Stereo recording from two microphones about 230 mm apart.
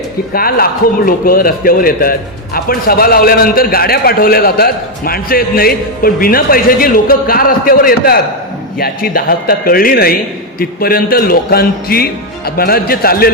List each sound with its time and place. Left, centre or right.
0.3 s a man's voice: left